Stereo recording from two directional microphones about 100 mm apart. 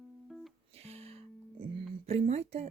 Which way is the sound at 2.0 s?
90° right.